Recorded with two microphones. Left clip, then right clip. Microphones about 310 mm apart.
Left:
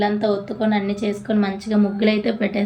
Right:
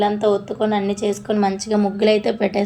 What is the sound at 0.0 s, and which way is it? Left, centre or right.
Speech, centre.